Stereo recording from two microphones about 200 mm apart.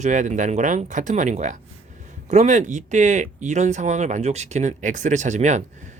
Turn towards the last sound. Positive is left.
turn(degrees=-35)  # may be behind; listen again after turning